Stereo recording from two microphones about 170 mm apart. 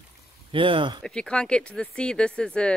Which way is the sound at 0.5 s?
30° right (ahead or behind).